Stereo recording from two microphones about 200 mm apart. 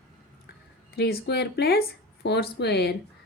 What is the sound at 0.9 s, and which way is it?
A woman's voice, 50° left (ahead or behind).